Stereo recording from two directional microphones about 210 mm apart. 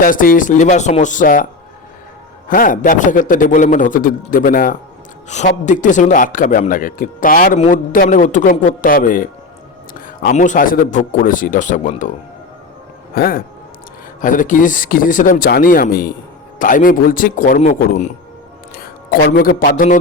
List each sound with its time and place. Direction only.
0.0 s a man's voice: 40° left (ahead or behind)
2.5 s a man's voice: 40° left (ahead or behind)
13.1 s a man's voice: 45° left (ahead or behind)